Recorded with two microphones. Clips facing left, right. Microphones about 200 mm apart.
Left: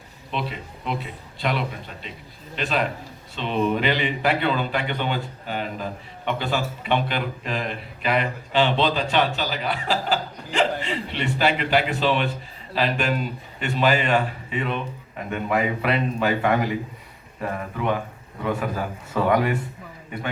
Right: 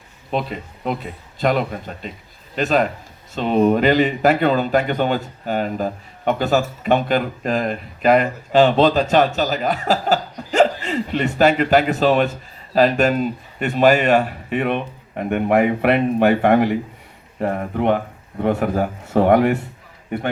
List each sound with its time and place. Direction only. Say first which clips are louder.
0.3 s speech: right 6 dB; 45° right (ahead or behind)
14.5 s speech: right 7 dB; 60° right (ahead or behind)